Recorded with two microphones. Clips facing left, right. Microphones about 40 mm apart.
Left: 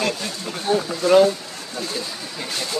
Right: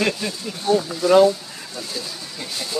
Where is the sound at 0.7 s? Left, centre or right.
Centre.